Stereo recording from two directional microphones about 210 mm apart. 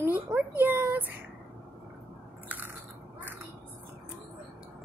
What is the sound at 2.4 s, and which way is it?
Biting, 10° right (ahead or behind).